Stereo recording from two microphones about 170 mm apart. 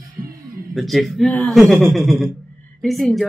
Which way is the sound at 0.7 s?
Centre (ahead or behind).